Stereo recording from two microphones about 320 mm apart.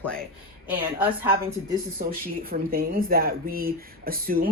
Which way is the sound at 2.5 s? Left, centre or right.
Right.